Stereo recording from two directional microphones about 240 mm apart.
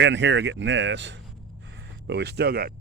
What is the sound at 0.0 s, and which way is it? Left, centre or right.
Speech, right.